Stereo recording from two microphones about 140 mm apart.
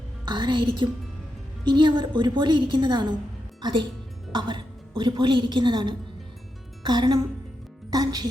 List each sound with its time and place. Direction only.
0.3 s a woman's voice: 35° right (ahead or behind)